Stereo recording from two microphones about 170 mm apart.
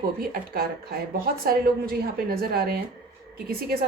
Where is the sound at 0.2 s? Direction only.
60° right (ahead or behind).